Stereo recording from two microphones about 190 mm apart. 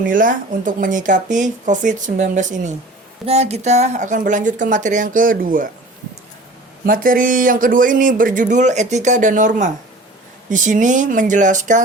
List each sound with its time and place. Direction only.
0.0 s speech: 45° right (ahead or behind)
6.8 s speech: 45° right (ahead or behind)